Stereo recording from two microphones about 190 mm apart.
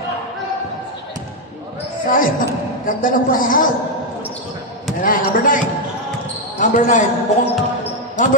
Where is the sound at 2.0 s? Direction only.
45° left (ahead or behind).